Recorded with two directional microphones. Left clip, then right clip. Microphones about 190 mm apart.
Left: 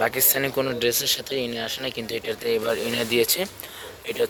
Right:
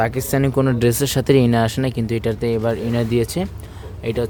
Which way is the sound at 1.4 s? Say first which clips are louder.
Right 10 dB; 40° right (ahead or behind).